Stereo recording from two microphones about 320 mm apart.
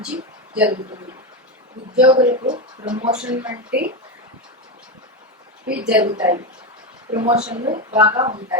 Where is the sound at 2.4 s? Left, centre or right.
Centre.